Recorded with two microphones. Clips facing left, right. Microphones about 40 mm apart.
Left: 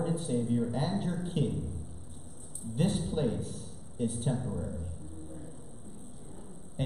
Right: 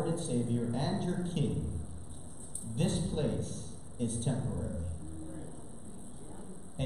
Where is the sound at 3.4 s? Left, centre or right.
Centre.